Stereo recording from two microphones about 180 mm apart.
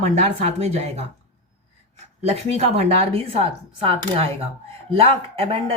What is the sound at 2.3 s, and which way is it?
Speech, 35° right (ahead or behind).